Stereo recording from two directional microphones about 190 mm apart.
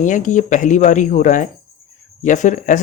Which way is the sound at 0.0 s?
40° left (ahead or behind).